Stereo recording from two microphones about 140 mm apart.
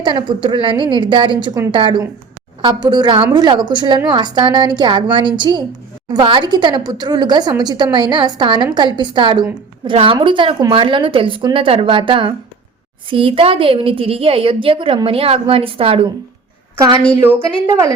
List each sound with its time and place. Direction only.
0.0 s a woman's voice: 35° right (ahead or behind)
16.7 s a woman's voice: 25° right (ahead or behind)